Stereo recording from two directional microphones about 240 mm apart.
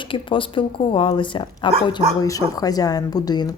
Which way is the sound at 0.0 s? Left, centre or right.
Left.